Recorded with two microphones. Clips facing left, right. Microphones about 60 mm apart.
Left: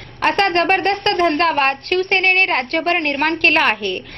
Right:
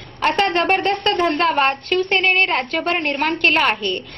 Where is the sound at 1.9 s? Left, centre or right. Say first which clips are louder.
Left 1 dB; left.